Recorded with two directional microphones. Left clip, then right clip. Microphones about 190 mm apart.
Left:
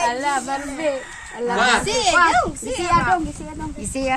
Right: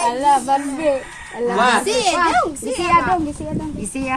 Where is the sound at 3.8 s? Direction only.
45° left (ahead or behind).